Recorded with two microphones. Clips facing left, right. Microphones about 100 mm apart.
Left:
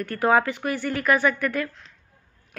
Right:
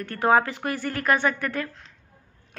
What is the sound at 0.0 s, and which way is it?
A woman's voice, 30° right (ahead or behind).